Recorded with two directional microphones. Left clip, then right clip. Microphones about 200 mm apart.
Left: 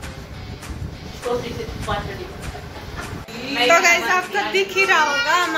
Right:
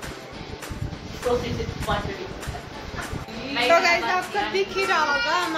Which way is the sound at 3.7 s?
5° left (ahead or behind).